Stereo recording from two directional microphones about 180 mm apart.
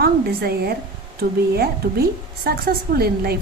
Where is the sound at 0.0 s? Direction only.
60° right (ahead or behind).